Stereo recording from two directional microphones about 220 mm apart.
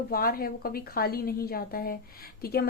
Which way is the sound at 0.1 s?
40° left (ahead or behind).